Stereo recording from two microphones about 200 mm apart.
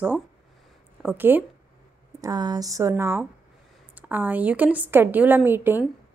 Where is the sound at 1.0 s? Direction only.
10° right (ahead or behind).